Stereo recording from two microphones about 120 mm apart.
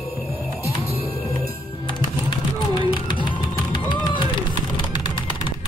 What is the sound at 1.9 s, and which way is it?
Music, 40° left (ahead or behind).